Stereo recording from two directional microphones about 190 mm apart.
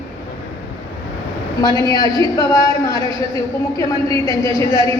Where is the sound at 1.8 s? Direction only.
20° left (ahead or behind).